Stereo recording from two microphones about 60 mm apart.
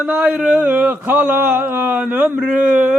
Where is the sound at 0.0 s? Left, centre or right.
Right.